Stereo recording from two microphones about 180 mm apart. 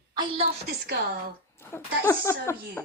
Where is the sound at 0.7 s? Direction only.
60° right (ahead or behind).